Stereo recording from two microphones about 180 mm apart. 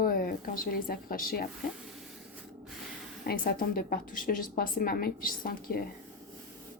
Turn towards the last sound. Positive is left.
turn(degrees=55)  # may be behind; listen again after turning